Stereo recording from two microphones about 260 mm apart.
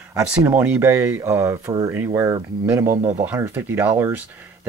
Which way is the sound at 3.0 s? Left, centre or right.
Right.